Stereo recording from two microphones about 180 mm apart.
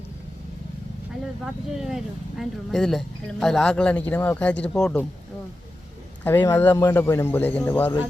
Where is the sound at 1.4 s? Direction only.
5° right (ahead or behind).